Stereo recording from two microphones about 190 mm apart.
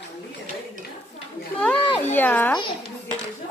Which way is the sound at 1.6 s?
5° left (ahead or behind).